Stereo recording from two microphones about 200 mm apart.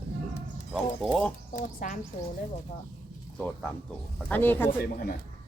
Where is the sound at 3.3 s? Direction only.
Centre (ahead or behind).